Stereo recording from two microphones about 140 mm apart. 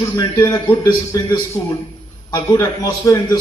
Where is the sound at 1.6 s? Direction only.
40° left (ahead or behind).